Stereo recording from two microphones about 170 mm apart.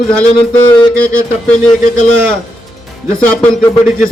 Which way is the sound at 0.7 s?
10° left (ahead or behind).